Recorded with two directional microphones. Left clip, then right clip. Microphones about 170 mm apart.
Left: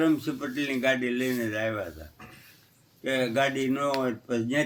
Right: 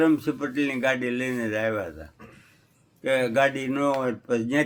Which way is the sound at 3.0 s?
45° right (ahead or behind).